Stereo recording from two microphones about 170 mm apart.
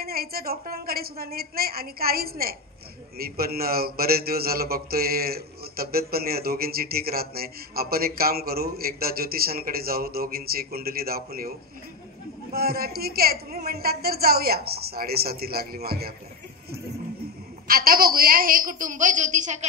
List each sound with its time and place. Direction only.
0.0 s speech: 65° right (ahead or behind)
12.5 s speech: 65° right (ahead or behind)
17.6 s a woman's voice: 60° right (ahead or behind)